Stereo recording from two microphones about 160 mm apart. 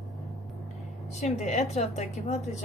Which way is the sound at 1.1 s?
45° left (ahead or behind).